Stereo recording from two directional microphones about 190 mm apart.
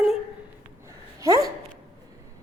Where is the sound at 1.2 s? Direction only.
15° right (ahead or behind).